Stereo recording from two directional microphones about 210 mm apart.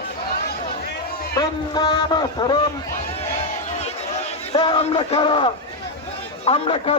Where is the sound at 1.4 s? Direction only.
20° left (ahead or behind).